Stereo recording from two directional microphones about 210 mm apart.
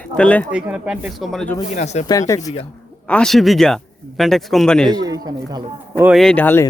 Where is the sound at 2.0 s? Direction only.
15° left (ahead or behind).